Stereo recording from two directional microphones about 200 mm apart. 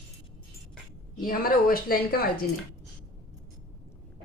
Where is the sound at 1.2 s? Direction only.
45° left (ahead or behind).